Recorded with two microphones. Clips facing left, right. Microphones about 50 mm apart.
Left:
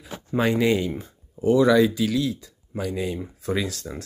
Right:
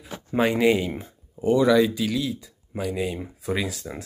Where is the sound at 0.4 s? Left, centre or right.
Centre.